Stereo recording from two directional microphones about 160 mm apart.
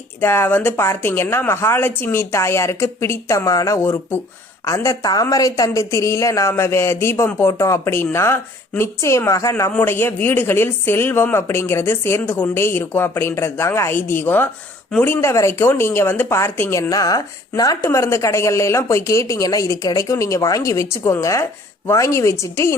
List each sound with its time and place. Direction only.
0.2 s a woman's voice: 15° left (ahead or behind)